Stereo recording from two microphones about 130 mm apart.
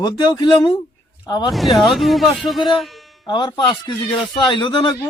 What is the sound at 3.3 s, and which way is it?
Speech, 35° left (ahead or behind).